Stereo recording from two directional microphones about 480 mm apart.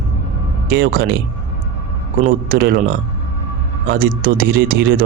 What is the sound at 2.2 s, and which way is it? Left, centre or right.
Speech, centre.